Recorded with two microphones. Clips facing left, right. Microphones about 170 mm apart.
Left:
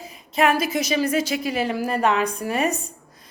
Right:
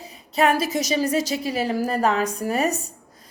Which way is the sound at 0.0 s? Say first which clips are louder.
Even; 35° right (ahead or behind).